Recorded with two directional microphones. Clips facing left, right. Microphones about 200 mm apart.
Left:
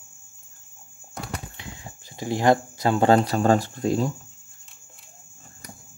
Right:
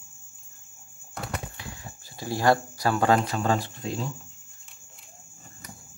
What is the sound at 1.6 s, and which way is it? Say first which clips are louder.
Speech: left 1 dB; 20° left (ahead or behind).